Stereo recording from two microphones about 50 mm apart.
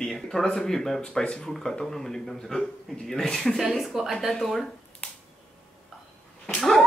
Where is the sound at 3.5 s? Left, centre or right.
Centre.